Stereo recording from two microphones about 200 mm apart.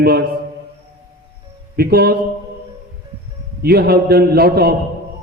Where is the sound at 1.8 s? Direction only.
50° right (ahead or behind).